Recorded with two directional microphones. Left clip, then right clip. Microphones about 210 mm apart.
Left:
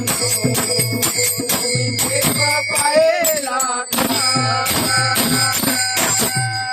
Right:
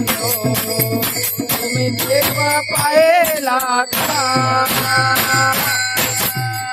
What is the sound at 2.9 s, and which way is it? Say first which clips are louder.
Music: right 4 dB; 55° right (ahead or behind).